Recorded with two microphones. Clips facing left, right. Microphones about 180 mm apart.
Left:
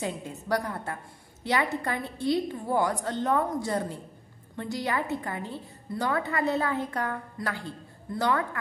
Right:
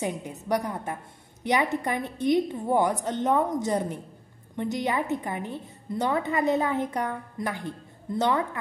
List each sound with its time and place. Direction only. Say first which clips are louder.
0.0 s a woman's voice: right 2 dB; 15° right (ahead or behind)